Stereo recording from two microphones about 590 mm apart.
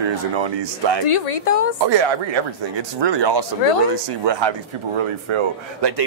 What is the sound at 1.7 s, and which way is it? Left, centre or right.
Speech, right.